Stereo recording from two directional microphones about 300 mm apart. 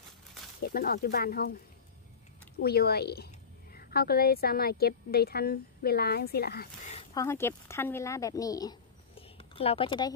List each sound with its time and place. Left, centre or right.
0.6 s a woman's voice: left
2.6 s a woman's voice: left
7.2 s speech: centre